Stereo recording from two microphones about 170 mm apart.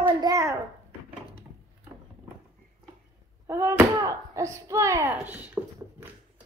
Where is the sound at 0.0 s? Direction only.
20° right (ahead or behind).